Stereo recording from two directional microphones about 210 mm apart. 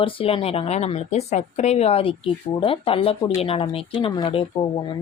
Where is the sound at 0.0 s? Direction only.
25° left (ahead or behind).